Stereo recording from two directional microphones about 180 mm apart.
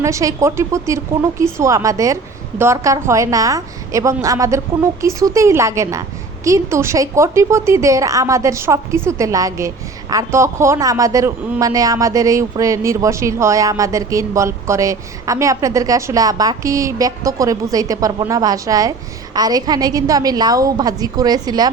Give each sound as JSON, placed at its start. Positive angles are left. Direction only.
{"t": 0.0, "sound": "a woman's voice", "side_deg": -15}